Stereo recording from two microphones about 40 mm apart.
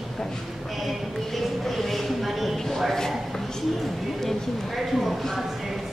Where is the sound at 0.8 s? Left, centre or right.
Centre.